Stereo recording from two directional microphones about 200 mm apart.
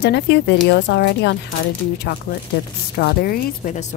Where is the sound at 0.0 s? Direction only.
55° left (ahead or behind).